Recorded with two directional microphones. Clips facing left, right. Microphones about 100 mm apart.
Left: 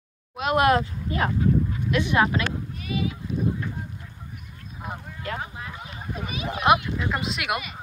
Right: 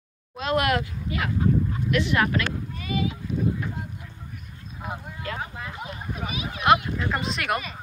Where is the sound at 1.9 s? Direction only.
20° left (ahead or behind).